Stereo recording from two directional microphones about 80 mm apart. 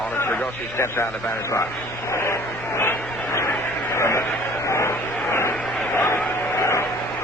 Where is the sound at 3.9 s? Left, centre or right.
Left.